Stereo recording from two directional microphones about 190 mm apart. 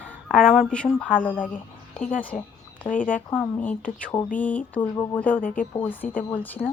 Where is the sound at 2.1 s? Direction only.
45° left (ahead or behind).